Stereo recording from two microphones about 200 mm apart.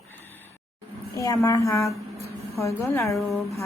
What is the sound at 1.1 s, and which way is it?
A woman's voice, 15° left (ahead or behind).